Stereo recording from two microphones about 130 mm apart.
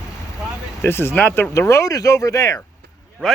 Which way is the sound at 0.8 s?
20° left (ahead or behind).